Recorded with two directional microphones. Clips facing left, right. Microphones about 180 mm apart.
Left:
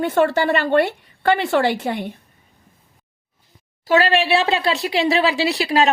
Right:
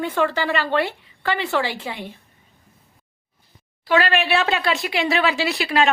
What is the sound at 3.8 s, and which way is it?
Speech, 35° left (ahead or behind).